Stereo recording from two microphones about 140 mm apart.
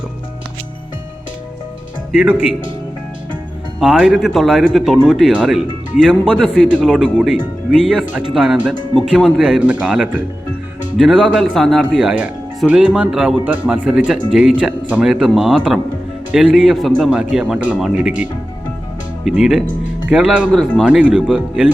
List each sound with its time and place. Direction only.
3.8 s speech: 5° right (ahead or behind)
6.7 s speech: 5° right (ahead or behind)
20.5 s speech: 5° left (ahead or behind)